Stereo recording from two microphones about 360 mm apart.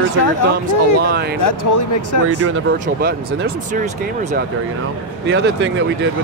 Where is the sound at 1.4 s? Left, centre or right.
Left.